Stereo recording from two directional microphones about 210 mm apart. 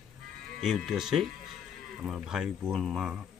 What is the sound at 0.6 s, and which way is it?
Speech, centre (ahead or behind).